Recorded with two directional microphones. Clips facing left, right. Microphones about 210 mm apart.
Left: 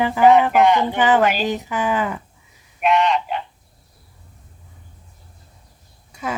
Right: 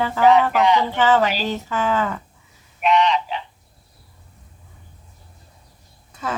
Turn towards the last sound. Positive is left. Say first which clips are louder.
# left 1 dB
turn(degrees=10)  # may be behind; listen again after turning